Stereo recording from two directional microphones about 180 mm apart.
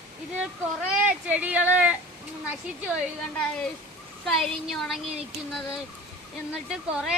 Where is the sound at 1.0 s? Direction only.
10° right (ahead or behind).